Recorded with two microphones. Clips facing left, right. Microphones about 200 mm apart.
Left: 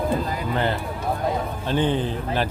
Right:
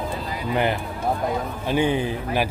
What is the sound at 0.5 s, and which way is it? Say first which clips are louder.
A man's voice: right 3 dB; 15° right (ahead or behind).